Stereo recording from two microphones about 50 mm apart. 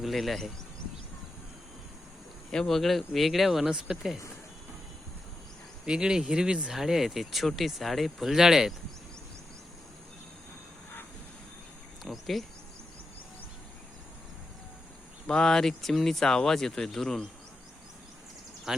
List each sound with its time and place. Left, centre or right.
0.0 s speech: centre
2.5 s speech: centre
5.8 s speech: centre
12.0 s speech: centre
15.3 s speech: centre